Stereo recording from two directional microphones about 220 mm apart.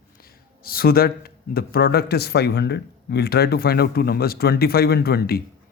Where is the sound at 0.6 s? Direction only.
45° left (ahead or behind).